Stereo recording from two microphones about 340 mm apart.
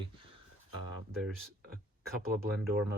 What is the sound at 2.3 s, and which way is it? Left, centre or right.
Speech, right.